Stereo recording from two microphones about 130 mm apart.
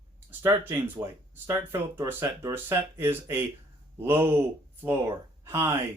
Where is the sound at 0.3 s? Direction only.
15° right (ahead or behind).